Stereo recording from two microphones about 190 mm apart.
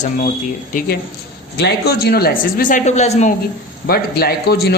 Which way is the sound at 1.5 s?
60° left (ahead or behind).